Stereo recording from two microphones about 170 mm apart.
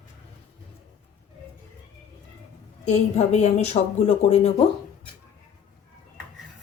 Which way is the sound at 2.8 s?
40° left (ahead or behind).